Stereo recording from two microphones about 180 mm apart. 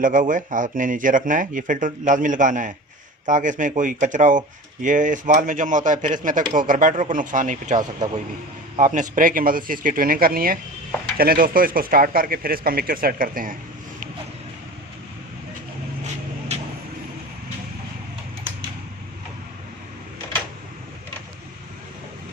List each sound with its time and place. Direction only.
0.0 s speech: 45° right (ahead or behind)
8.8 s speech: 45° right (ahead or behind)
16.5 s vehicle: 35° right (ahead or behind)